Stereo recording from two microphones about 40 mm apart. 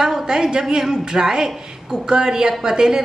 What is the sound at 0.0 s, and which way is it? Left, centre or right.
A woman's voice, centre.